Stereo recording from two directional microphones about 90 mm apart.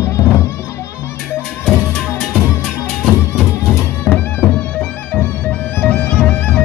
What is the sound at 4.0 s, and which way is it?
Music, 20° left (ahead or behind).